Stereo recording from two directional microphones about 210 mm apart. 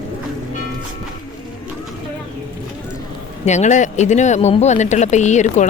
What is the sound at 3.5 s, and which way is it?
Speech, 35° left (ahead or behind).